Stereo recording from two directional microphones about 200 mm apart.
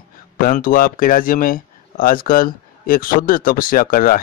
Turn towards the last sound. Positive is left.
turn(degrees=45)  # may be behind; listen again after turning